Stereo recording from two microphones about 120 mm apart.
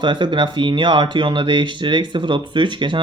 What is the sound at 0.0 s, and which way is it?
Speech, 40° right (ahead or behind).